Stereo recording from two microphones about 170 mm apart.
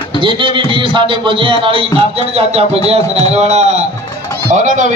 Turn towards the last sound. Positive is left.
turn(degrees=-45)  # may be behind; listen again after turning